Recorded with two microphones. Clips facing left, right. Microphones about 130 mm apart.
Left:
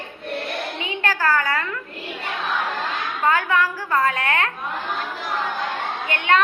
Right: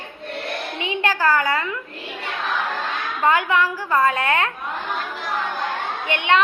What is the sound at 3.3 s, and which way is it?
A woman's voice, 20° right (ahead or behind).